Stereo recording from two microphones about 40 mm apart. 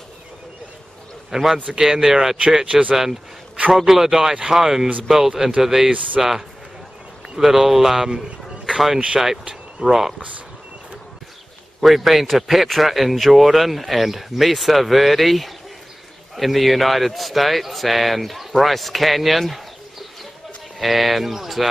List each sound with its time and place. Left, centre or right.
1.3 s speech: centre
2.6 s speech: right
3.7 s speech: centre
7.3 s speech: centre
9.4 s a sound: right
9.8 s speech: centre
10.1 s speech: right
11.8 s speech: centre
20.8 s speech: centre